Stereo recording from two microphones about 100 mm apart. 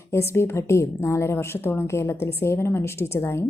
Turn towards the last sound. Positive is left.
turn(degrees=25)  # may be behind; listen again after turning